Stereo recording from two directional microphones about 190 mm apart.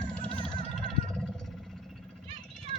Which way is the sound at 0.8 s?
Centre (ahead or behind).